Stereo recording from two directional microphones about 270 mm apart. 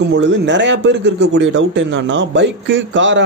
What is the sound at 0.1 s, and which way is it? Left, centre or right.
A man's voice, right.